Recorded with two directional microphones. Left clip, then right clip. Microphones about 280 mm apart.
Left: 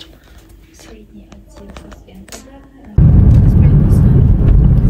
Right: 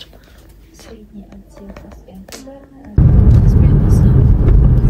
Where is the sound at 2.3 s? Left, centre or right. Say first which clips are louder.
Even; centre.